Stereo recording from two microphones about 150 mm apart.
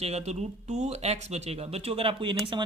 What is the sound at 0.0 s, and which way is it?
Speech, 45° right (ahead or behind).